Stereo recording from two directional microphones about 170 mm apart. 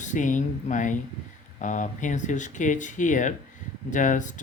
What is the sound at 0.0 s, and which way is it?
Speech, 45° left (ahead or behind).